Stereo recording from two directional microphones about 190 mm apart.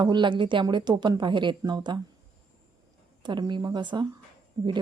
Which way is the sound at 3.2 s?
25° right (ahead or behind).